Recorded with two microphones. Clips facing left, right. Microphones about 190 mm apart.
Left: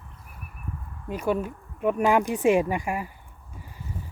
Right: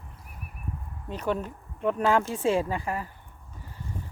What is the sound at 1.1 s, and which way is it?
Speech, 10° left (ahead or behind).